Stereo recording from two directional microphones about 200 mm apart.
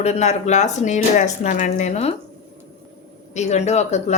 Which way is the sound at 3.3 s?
35° left (ahead or behind).